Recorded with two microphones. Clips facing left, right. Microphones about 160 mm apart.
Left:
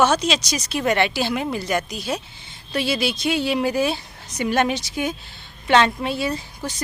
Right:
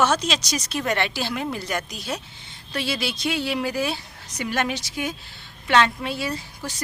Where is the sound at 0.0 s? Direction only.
5° left (ahead or behind).